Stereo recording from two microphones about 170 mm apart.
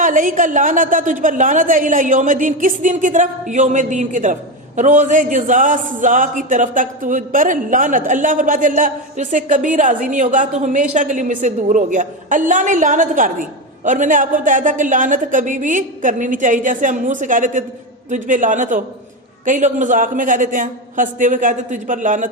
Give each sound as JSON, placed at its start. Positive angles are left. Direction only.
{"t": 0.0, "sound": "speech", "side_deg": -50}